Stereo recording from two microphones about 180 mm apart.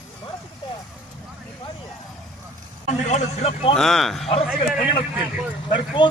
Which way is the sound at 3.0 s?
40° left (ahead or behind).